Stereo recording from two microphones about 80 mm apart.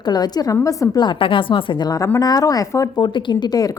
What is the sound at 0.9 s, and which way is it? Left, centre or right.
Speech, left.